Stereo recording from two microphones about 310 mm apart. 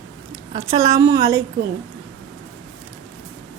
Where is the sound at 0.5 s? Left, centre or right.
Centre.